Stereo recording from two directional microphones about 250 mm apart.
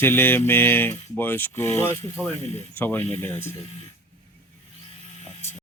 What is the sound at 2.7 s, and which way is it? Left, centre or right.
Speech, centre.